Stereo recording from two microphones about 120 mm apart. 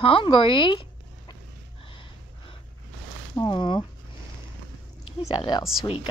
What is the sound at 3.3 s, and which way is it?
Speech, 40° left (ahead or behind).